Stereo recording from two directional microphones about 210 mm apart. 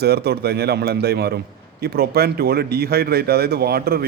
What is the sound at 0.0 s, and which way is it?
A man's voice, 50° right (ahead or behind).